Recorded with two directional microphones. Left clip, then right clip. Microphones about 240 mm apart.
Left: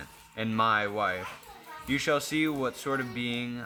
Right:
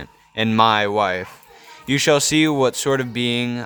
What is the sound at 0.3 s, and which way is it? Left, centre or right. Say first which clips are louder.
Speech: right 10 dB; right.